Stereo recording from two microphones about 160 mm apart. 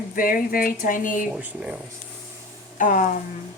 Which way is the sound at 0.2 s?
60° left (ahead or behind).